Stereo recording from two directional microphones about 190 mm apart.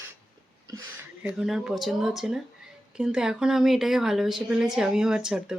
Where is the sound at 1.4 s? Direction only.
5° right (ahead or behind).